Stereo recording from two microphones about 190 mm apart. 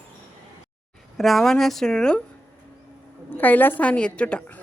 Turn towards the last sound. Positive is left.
turn(degrees=5)  # may be behind; listen again after turning